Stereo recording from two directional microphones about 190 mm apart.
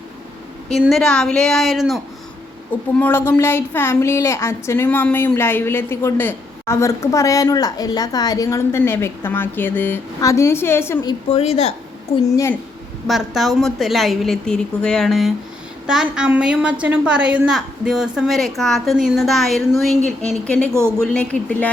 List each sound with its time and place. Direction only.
0.7 s a woman's voice: centre (ahead or behind)
3.0 s a woman's voice: 10° left (ahead or behind)
11.3 s a woman's voice: 35° left (ahead or behind)
13.1 s a woman's voice: centre (ahead or behind)
21.0 s a woman's voice: 5° left (ahead or behind)